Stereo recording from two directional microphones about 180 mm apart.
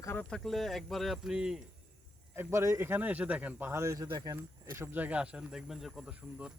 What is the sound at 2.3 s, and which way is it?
Speech, 15° right (ahead or behind).